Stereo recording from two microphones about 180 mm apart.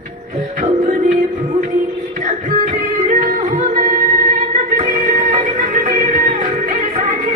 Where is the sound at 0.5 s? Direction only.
40° right (ahead or behind).